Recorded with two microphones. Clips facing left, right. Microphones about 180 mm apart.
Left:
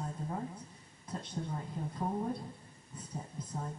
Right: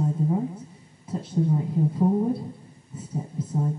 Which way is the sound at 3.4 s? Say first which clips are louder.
Right 12 dB; 5° right (ahead or behind).